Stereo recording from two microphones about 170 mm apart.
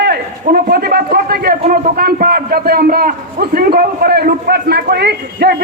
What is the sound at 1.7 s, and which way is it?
A man's voice, 65° right (ahead or behind).